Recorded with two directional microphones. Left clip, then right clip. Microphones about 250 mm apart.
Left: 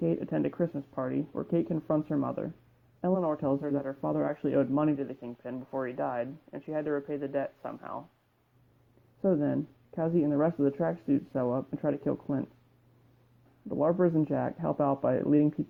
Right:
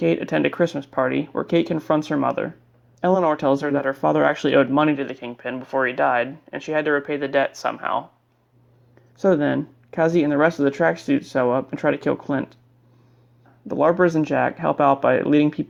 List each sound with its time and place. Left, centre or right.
0.0 s speech: centre
9.2 s speech: right
13.7 s speech: centre